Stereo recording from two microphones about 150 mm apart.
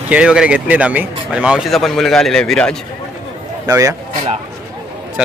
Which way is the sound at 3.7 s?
20° right (ahead or behind).